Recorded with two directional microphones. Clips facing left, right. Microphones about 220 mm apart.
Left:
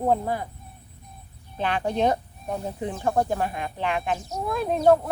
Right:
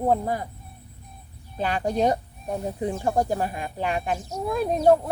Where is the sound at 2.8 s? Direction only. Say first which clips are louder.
Even; 10° right (ahead or behind).